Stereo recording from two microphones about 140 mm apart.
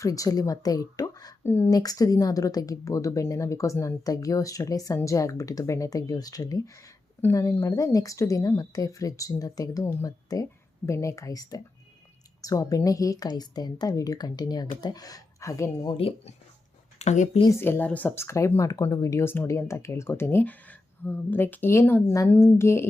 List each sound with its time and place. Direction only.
0.0 s a woman's voice: 25° left (ahead or behind)
16.0 s speech: 45° left (ahead or behind)
17.6 s a woman's voice: 15° left (ahead or behind)